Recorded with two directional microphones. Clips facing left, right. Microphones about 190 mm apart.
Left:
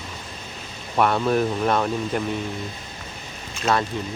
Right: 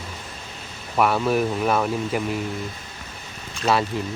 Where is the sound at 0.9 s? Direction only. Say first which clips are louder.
Even; 5° right (ahead or behind).